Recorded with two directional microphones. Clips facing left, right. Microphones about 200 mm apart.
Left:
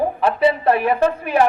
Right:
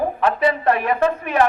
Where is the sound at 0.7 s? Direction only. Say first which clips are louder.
Left 2 dB; 30° left (ahead or behind).